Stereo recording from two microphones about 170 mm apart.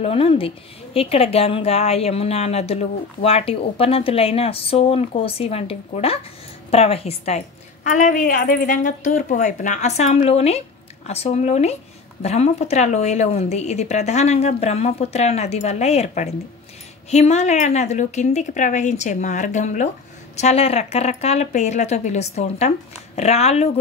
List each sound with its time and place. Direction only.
0.0 s a woman's voice: 35° left (ahead or behind)